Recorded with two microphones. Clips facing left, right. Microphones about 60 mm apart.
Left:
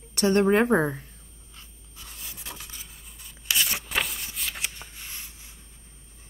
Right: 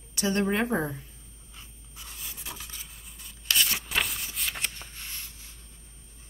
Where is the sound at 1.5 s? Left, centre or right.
Centre.